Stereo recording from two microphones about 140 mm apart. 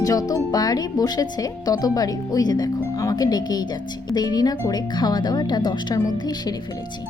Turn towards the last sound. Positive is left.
turn(degrees=30)  # may be behind; listen again after turning